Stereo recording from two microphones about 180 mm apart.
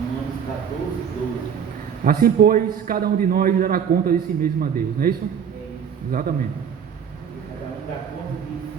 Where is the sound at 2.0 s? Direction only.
55° right (ahead or behind).